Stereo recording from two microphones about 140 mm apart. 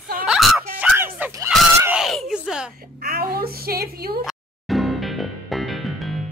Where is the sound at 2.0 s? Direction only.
Centre (ahead or behind).